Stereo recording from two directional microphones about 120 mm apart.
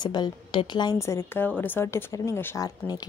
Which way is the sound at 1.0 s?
25° left (ahead or behind).